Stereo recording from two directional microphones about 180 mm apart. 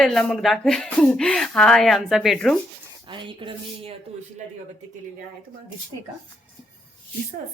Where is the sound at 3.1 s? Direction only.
25° right (ahead or behind).